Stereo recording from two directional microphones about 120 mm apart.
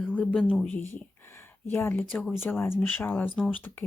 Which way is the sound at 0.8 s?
20° left (ahead or behind).